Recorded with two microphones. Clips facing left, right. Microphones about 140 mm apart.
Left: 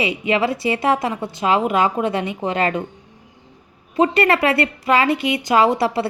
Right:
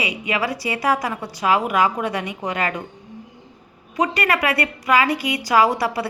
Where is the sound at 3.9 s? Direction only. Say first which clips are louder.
Left 5 dB; 25° left (ahead or behind).